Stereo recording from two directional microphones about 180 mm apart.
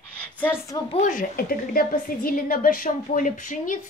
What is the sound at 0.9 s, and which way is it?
A woman's voice, 40° left (ahead or behind).